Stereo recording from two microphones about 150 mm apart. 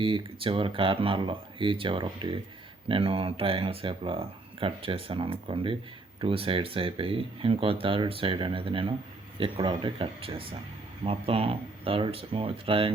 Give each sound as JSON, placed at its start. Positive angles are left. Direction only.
{"t": 0.0, "sound": "speech", "side_deg": -35}